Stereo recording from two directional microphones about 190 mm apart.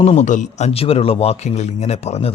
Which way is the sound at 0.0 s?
40° left (ahead or behind).